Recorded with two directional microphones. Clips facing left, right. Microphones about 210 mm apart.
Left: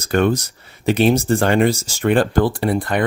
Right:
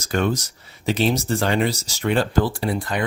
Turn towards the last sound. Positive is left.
turn(degrees=55)  # may be behind; listen again after turning